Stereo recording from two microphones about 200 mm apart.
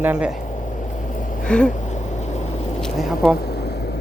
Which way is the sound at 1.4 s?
5° left (ahead or behind).